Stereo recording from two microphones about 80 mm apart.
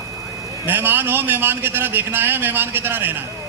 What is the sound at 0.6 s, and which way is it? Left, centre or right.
A man's voice, right.